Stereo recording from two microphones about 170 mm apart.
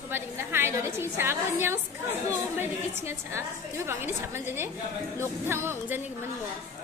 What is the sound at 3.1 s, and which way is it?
A woman's voice, 15° right (ahead or behind).